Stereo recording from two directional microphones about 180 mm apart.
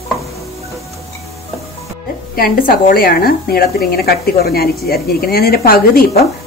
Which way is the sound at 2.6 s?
55° left (ahead or behind).